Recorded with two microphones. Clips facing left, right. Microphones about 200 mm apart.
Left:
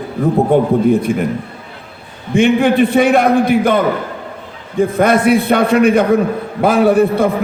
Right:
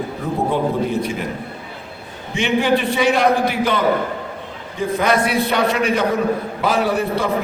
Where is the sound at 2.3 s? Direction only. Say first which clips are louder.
Left 7 dB; 55° left (ahead or behind).